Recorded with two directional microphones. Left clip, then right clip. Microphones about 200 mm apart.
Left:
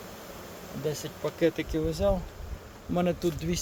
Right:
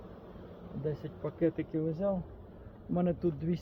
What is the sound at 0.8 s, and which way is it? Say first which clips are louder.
Speech: left 5 dB; 15° left (ahead or behind).